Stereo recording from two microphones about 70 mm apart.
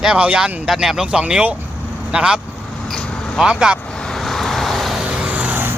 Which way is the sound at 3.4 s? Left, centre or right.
Centre.